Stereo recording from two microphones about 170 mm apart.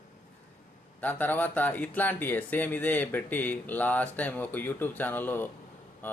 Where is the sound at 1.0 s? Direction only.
10° left (ahead or behind).